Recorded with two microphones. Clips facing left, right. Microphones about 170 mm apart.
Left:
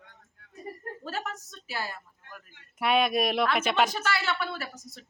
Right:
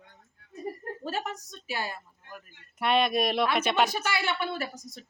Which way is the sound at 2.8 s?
5° left (ahead or behind).